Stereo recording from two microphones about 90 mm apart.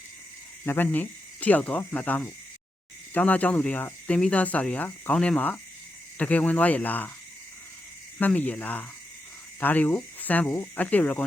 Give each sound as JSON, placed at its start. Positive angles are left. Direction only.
{"t": 0.6, "sound": "speech", "side_deg": 20}
{"t": 8.3, "sound": "speech", "side_deg": 15}